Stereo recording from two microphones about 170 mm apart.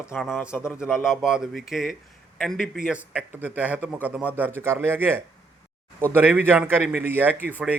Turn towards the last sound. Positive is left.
turn(degrees=-10)  # may be behind; listen again after turning